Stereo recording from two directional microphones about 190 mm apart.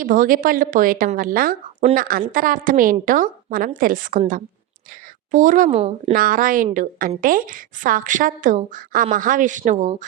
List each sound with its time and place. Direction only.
0.0 s a woman's voice: 45° right (ahead or behind)